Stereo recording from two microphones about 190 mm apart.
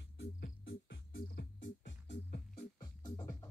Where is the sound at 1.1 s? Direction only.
50° left (ahead or behind).